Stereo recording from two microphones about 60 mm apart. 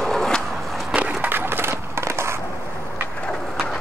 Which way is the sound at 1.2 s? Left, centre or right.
Right.